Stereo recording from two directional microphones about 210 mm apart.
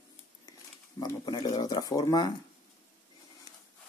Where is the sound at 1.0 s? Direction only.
20° left (ahead or behind).